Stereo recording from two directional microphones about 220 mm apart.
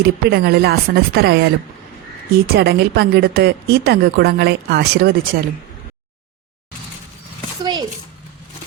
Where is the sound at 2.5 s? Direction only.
45° right (ahead or behind).